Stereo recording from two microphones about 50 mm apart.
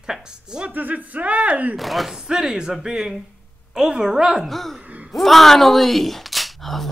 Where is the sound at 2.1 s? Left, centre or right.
Centre.